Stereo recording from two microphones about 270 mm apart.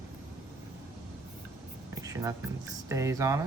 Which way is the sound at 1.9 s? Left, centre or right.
Centre.